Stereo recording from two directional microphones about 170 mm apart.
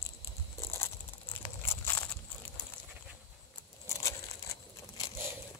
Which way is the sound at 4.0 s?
20° left (ahead or behind).